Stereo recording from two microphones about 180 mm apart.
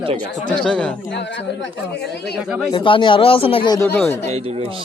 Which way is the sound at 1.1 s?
75° left (ahead or behind).